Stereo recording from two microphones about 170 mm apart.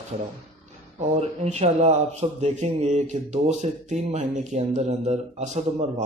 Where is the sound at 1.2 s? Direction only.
40° right (ahead or behind).